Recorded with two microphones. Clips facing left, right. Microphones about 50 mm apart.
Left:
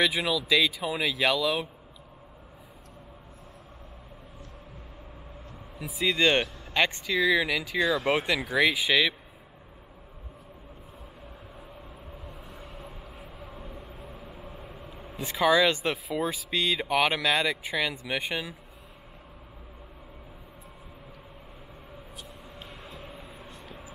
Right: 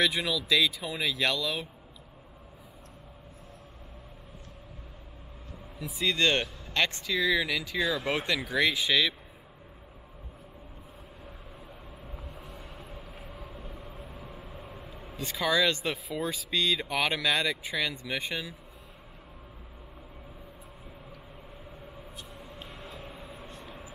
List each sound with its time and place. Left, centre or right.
0.0 s speech: centre
5.9 s speech: centre
14.0 s vehicle: centre
15.1 s speech: centre
22.7 s vehicle: centre